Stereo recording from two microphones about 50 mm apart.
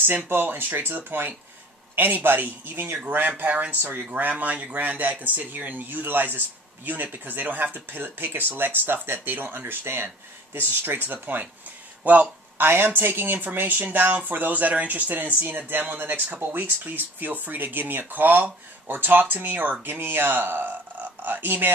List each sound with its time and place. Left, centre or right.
0.0 s speech: right
12.0 s speech: right
12.5 s speech: right